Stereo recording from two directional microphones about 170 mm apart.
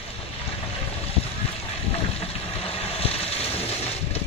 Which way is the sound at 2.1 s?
35° left (ahead or behind).